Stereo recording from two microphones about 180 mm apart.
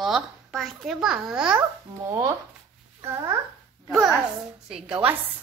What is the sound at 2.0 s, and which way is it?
Speech, 20° right (ahead or behind).